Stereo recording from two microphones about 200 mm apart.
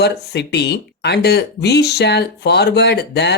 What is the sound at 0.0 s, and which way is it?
Speech, 55° left (ahead or behind).